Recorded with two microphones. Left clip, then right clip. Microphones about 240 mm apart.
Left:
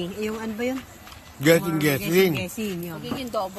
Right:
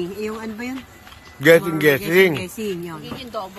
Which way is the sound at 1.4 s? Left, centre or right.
Centre.